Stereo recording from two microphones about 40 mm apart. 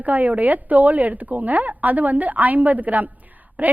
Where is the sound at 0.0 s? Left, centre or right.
Right.